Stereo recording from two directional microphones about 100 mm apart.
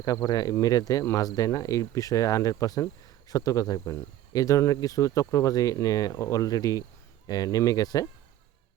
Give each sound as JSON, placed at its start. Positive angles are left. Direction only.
{"t": 0.0, "sound": "speech", "side_deg": 35}